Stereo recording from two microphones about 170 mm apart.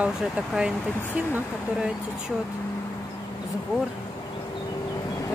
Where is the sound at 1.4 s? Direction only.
5° right (ahead or behind).